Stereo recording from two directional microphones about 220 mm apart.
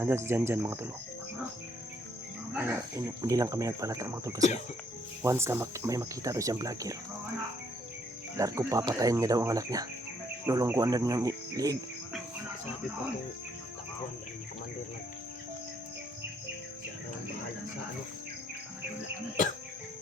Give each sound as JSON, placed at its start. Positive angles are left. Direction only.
{"t": 0.0, "sound": "speech", "side_deg": -10}
{"t": 2.5, "sound": "speech", "side_deg": -10}
{"t": 8.4, "sound": "speech", "side_deg": -15}